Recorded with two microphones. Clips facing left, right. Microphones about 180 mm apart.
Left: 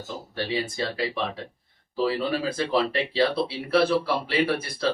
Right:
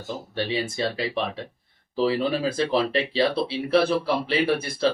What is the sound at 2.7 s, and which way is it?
Speech, 25° right (ahead or behind).